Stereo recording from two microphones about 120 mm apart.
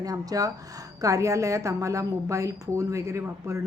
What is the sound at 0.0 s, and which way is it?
A woman's voice, 30° right (ahead or behind).